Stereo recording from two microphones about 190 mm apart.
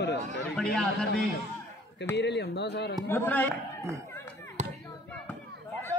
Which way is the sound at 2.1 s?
65° left (ahead or behind).